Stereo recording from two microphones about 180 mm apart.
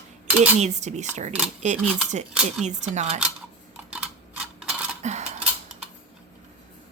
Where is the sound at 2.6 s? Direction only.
40° right (ahead or behind).